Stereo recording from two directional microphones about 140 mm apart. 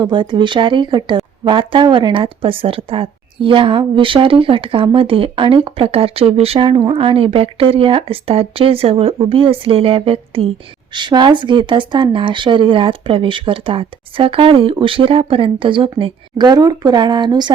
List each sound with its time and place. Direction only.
0.0 s speech: 35° right (ahead or behind)
16.5 s speech: 30° right (ahead or behind)